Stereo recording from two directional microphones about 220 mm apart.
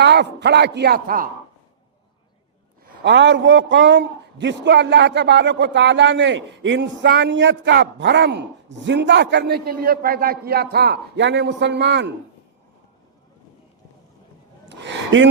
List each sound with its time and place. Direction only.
0.0 s a man's voice: 50° right (ahead or behind)
3.0 s a man's voice: 55° right (ahead or behind)
14.7 s a sound: 55° right (ahead or behind)